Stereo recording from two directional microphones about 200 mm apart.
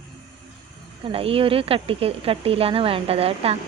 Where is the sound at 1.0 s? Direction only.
30° right (ahead or behind).